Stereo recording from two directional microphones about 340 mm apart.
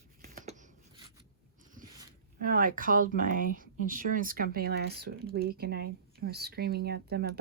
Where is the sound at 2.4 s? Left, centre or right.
Right.